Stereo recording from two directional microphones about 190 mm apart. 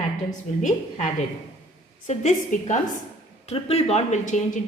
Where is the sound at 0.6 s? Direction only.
40° left (ahead or behind).